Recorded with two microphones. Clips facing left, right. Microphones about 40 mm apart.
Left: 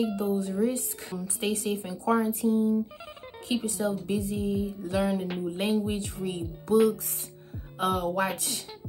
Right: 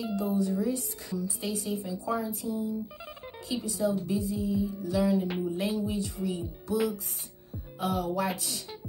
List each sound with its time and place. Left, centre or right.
0.0 s speech: left
7.8 s speech: left